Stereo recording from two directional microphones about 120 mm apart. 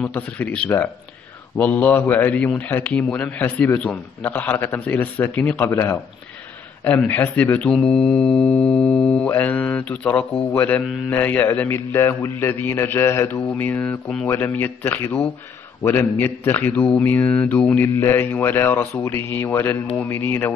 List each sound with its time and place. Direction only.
0.0 s a man's voice: 10° left (ahead or behind)